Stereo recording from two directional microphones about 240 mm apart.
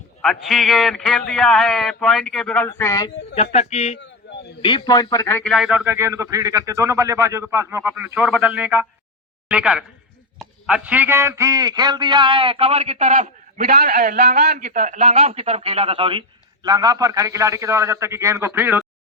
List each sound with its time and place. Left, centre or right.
0.2 s speech: centre
3.3 s speech: left
4.2 s a sound: left
4.6 s a man's voice: centre